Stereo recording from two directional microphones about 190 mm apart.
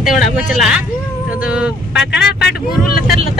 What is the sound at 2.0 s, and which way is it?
Speech, 65° left (ahead or behind).